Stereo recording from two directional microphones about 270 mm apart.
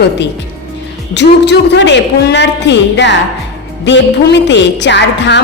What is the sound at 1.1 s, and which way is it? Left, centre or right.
A woman's voice, left.